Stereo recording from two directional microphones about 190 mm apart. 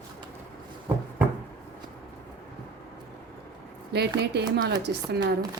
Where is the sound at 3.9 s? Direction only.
60° right (ahead or behind).